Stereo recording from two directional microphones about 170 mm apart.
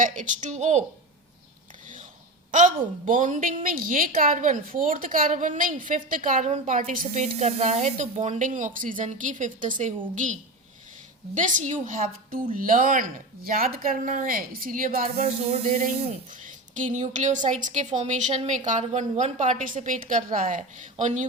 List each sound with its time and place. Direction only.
0.0 s a woman's voice: 45° right (ahead or behind)
2.5 s a woman's voice: 50° right (ahead or behind)
11.3 s a woman's voice: 50° right (ahead or behind)